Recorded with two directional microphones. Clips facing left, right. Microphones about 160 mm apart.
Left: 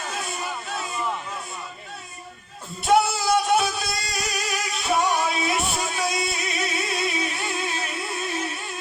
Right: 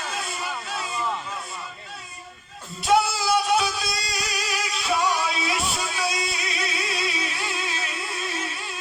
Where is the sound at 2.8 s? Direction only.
50° left (ahead or behind).